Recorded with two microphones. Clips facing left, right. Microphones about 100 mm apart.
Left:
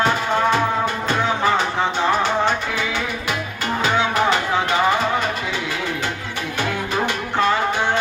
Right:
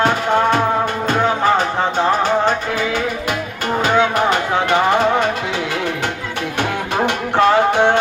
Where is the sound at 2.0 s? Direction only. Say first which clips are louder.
Right 3 dB; 40° right (ahead or behind).